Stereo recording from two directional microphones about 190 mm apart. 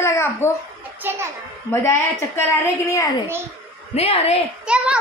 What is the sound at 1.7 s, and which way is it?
A woman's voice, 15° left (ahead or behind).